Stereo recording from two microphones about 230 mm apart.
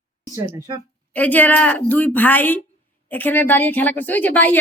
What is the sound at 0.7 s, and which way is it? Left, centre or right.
Speech, right.